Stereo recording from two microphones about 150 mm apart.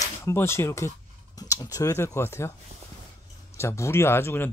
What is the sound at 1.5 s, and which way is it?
Speech, 20° left (ahead or behind).